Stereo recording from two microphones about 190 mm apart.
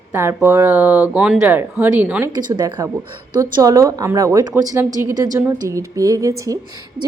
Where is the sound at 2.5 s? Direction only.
20° right (ahead or behind).